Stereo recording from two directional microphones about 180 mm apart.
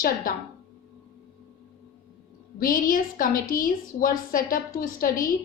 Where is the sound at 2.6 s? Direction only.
50° left (ahead or behind).